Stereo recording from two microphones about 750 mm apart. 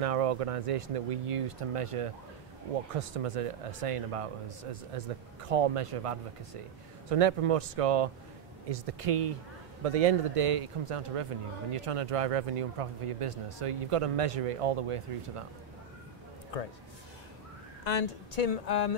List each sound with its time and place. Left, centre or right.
0.0 s speech: right
16.5 s a man's voice: left
17.8 s speech: left